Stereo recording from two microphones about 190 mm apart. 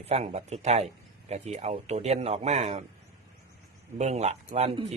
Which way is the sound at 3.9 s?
35° right (ahead or behind).